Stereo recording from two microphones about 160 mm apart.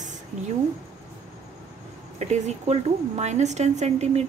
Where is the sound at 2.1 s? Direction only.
45° right (ahead or behind).